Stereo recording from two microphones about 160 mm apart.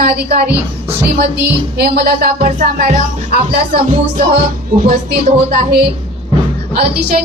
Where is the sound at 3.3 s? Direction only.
70° right (ahead or behind).